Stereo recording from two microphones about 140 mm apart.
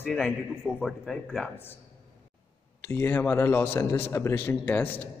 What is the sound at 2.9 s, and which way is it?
A man's voice, 15° left (ahead or behind).